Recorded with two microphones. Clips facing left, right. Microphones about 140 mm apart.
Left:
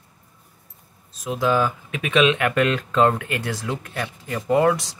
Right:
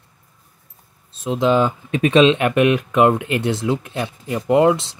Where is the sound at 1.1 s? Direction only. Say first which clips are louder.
Right 4 dB; 25° right (ahead or behind).